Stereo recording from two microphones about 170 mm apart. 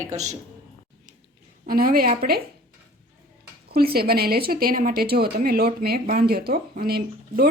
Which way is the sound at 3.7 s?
65° right (ahead or behind).